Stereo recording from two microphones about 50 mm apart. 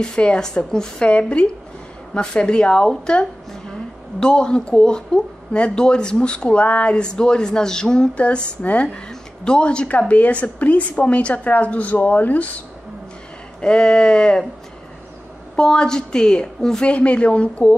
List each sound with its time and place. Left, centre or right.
0.0 s speech: centre
1.0 s a woman's voice: left
13.6 s speech: centre
15.5 s a woman's voice: centre